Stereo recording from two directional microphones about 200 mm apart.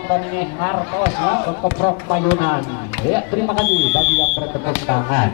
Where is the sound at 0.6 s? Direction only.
15° left (ahead or behind).